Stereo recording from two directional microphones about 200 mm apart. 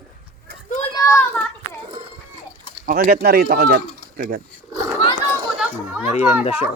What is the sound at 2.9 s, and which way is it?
Speech, 45° right (ahead or behind).